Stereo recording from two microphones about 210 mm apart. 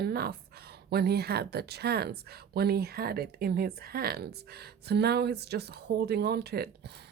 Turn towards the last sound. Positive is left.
turn(degrees=-50)  # may be behind; listen again after turning